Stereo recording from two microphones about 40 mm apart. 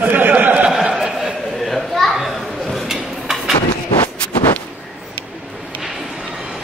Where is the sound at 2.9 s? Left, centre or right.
Centre.